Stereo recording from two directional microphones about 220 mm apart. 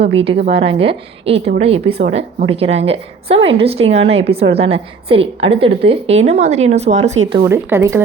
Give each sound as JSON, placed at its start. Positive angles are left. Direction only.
{"t": 0.1, "sound": "a woman's voice", "side_deg": -25}
{"t": 7.4, "sound": "speech", "side_deg": -10}